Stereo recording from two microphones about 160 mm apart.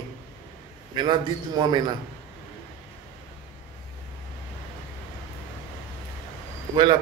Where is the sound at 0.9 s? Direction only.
30° right (ahead or behind).